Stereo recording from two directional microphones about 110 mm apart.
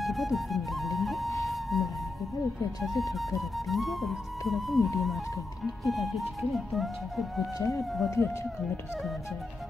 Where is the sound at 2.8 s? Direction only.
Centre (ahead or behind).